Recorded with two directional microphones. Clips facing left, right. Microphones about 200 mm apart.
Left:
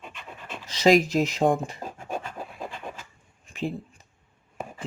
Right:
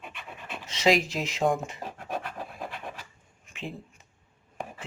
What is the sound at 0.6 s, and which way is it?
Speech, 35° left (ahead or behind).